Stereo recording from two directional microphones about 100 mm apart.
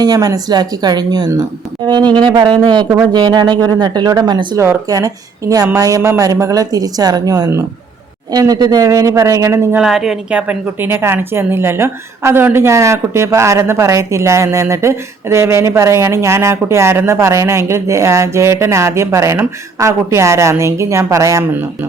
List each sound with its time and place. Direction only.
0.0 s speech: 40° right (ahead or behind)
4.5 s speech: 25° right (ahead or behind)
4.9 s speech: 35° right (ahead or behind)
9.7 s a woman's voice: 5° right (ahead or behind); by 21.4 s 30° right (ahead or behind)